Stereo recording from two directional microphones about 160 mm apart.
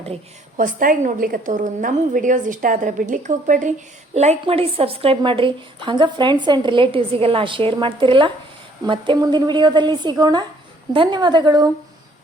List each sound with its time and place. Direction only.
0.5 s a woman's voice: 60° right (ahead or behind); by 11.7 s 25° right (ahead or behind)